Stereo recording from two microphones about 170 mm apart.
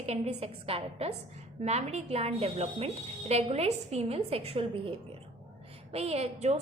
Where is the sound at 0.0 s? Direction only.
40° right (ahead or behind).